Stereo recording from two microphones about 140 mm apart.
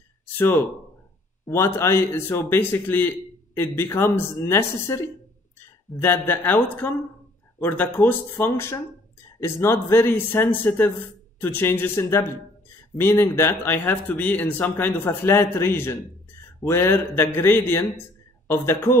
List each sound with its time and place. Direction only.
0.4 s speech: 15° left (ahead or behind)